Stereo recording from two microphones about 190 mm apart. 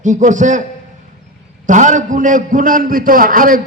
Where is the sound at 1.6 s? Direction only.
40° right (ahead or behind).